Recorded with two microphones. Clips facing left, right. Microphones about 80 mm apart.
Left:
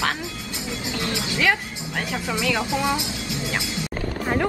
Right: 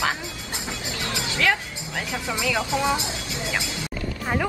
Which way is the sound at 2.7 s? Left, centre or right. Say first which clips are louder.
Even; right.